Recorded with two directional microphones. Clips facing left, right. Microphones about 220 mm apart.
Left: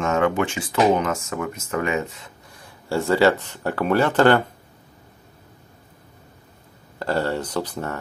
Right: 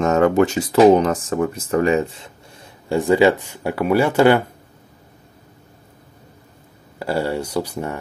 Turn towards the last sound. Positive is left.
turn(degrees=-10)  # may be behind; listen again after turning